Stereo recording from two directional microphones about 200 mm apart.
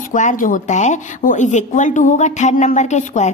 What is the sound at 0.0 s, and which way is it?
Speech, 40° left (ahead or behind).